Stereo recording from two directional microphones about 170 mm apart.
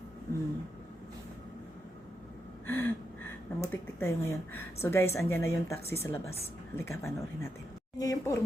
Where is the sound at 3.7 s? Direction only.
15° left (ahead or behind).